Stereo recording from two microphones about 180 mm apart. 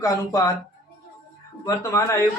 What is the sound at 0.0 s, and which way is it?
Speech, 20° left (ahead or behind).